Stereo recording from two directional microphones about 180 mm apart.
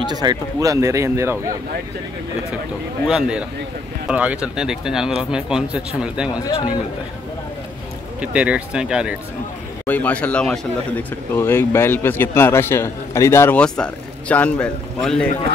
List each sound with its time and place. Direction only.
0.0 s speech: 25° right (ahead or behind)
3.1 s speech: 5° right (ahead or behind)
8.2 s speech: 5° right (ahead or behind)
9.8 s speech: 10° left (ahead or behind)